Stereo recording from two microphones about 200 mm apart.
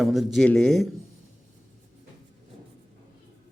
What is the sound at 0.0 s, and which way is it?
Speech, centre (ahead or behind).